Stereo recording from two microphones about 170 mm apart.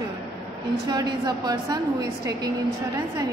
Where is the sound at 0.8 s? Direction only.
25° right (ahead or behind).